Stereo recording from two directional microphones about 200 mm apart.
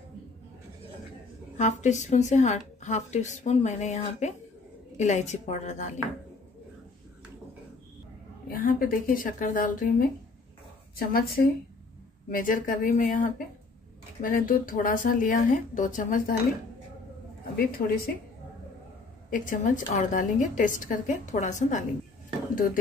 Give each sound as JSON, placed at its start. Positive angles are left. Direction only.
{"t": 1.6, "sound": "a woman's voice", "side_deg": 35}
{"t": 8.5, "sound": "a woman's voice", "side_deg": 45}
{"t": 17.6, "sound": "speech", "side_deg": 50}
{"t": 19.3, "sound": "a woman's voice", "side_deg": 40}